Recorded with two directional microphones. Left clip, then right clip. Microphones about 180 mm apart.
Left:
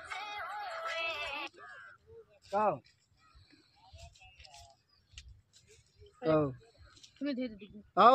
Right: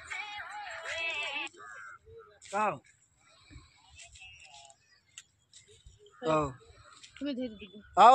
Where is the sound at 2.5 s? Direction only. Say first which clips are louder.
Even; 30° left (ahead or behind).